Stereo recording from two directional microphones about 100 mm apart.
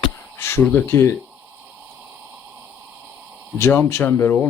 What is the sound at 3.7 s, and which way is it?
Speech, 25° left (ahead or behind).